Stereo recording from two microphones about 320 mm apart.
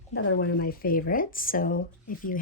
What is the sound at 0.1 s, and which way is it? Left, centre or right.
Speech, left.